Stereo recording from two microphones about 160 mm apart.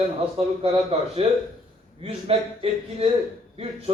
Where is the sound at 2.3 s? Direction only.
40° right (ahead or behind).